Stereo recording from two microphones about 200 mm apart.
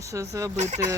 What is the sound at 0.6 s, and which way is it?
Speech, 35° right (ahead or behind).